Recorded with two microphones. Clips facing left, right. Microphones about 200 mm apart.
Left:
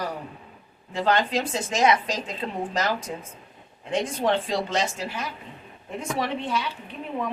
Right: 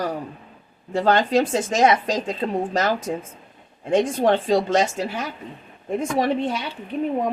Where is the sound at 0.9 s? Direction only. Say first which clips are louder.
Right 5 dB; 45° right (ahead or behind).